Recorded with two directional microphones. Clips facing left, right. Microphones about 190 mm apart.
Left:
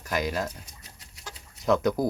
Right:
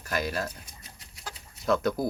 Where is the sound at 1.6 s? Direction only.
20° left (ahead or behind).